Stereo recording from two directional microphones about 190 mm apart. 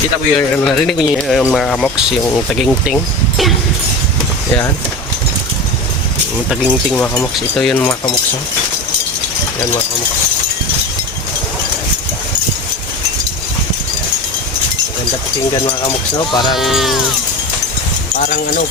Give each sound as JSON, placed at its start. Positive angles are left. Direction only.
{"t": 0.3, "sound": "speech", "side_deg": 5}
{"t": 6.5, "sound": "speech", "side_deg": 5}
{"t": 15.6, "sound": "speech", "side_deg": 25}
{"t": 16.6, "sound": "speech", "side_deg": 0}
{"t": 18.2, "sound": "speech", "side_deg": 45}